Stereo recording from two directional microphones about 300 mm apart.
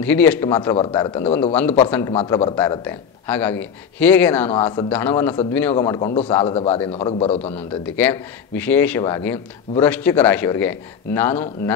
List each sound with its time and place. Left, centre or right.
0.0 s a man's voice: centre
7.5 s speech: centre